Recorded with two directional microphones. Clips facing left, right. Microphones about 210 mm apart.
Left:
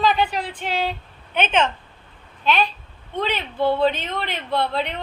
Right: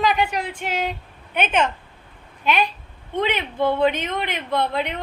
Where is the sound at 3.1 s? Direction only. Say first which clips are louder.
Right 2 dB; 20° right (ahead or behind).